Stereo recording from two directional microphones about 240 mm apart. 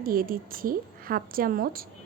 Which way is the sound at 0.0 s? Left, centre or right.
Right.